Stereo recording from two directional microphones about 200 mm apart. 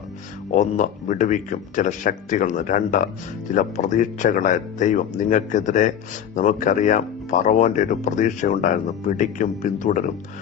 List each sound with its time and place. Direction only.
0.5 s speech: 35° left (ahead or behind)